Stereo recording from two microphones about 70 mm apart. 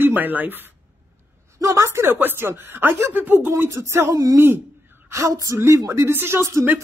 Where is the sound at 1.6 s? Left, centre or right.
Right.